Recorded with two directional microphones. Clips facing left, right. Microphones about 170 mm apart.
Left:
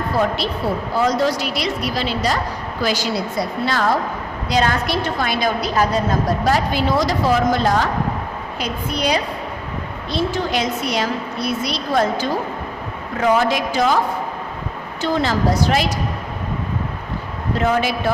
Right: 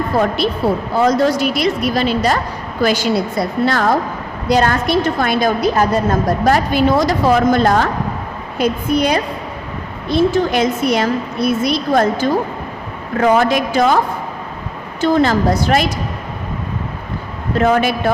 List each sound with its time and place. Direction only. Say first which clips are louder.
0.9 s a woman's voice: right 4 dB; 50° right (ahead or behind)
15.0 s a woman's voice: right 5 dB; 50° right (ahead or behind)
17.6 s a woman's voice: right 5 dB; 55° right (ahead or behind)